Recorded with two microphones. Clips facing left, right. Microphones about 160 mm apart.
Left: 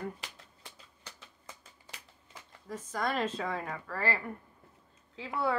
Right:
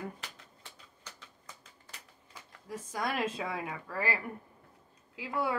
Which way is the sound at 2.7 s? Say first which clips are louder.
Left 2 dB; 10° right (ahead or behind).